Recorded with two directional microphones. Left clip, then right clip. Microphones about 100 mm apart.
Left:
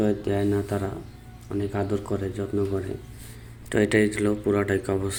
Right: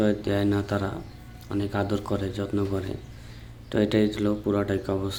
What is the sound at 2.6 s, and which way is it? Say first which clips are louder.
Speech: left 3 dB; 10° right (ahead or behind).